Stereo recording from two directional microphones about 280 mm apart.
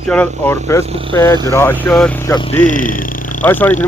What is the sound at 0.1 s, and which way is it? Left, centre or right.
Speech, centre.